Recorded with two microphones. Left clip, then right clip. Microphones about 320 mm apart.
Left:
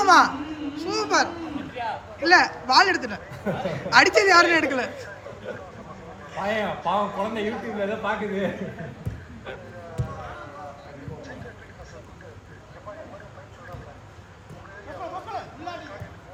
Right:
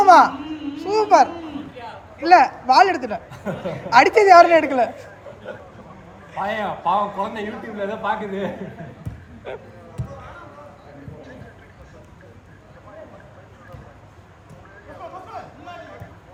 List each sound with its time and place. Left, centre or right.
0.0 s a child's voice: centre
6.3 s speech: centre
9.5 s speech: centre